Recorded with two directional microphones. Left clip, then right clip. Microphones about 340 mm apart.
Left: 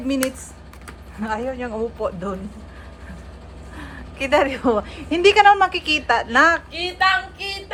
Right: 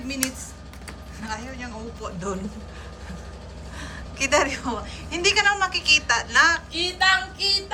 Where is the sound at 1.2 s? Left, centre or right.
Centre.